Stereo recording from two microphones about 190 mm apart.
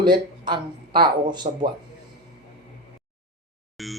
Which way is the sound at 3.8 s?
Centre (ahead or behind).